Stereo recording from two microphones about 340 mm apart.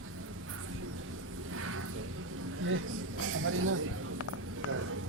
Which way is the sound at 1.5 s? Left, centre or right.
Right.